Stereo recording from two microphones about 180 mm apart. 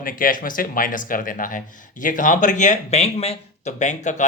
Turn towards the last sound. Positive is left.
turn(degrees=40)  # may be behind; listen again after turning